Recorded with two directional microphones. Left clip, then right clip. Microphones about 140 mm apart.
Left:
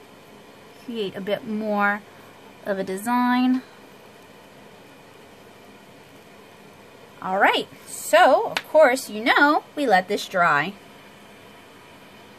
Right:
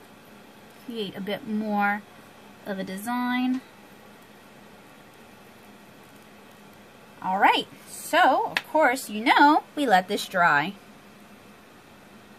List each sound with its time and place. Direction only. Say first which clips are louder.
0.9 s speech: left 5 dB; 30° left (ahead or behind)
2.6 s a sound: left 7 dB; 45° left (ahead or behind)
7.2 s speech: left 1 dB; 40° left (ahead or behind); by 9.6 s 20° left (ahead or behind)
9.8 s a woman's voice: left 2 dB; 5° right (ahead or behind)